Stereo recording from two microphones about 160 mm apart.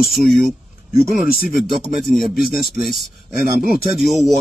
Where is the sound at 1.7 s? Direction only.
Centre (ahead or behind).